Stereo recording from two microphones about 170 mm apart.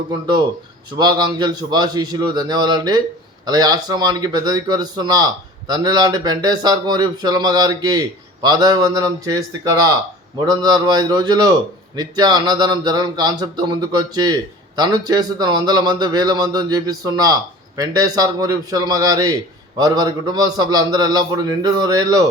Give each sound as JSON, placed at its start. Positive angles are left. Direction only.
{"t": 0.9, "sound": "speech", "side_deg": -25}
{"t": 10.4, "sound": "speech", "side_deg": -25}